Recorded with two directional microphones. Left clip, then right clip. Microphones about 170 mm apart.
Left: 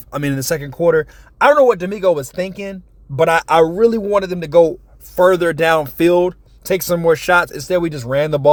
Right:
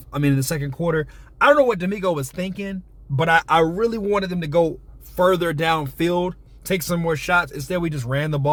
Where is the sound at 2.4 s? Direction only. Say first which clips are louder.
Left 6 dB; 30° left (ahead or behind).